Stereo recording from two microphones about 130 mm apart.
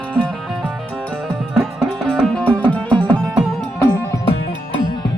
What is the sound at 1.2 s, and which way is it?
Music, centre (ahead or behind).